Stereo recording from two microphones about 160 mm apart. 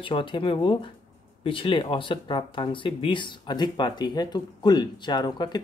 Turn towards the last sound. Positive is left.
turn(degrees=25)  # may be behind; listen again after turning